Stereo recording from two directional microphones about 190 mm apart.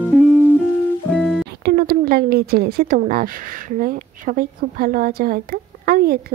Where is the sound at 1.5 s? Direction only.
55° right (ahead or behind).